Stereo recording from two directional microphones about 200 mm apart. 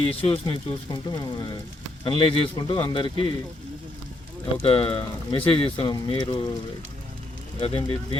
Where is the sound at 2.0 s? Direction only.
25° left (ahead or behind).